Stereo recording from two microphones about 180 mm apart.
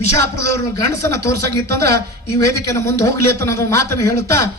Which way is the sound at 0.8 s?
15° left (ahead or behind).